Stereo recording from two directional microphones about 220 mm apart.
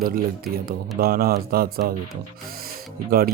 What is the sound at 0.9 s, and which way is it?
Speech, 40° right (ahead or behind).